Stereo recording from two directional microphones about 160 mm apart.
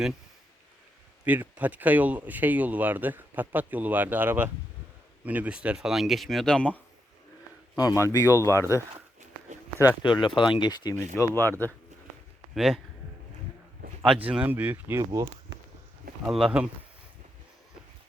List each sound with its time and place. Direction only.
1.2 s speech: 10° right (ahead or behind); by 6.7 s 5° left (ahead or behind)
8.0 s speech: 20° left (ahead or behind)
9.7 s speech: 25° left (ahead or behind)
11.1 s speech: 15° left (ahead or behind)
12.5 s speech: centre (ahead or behind)
14.3 s speech: 10° right (ahead or behind)
16.3 s speech: 5° right (ahead or behind)